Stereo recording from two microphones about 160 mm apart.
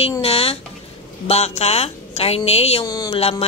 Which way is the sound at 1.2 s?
40° left (ahead or behind).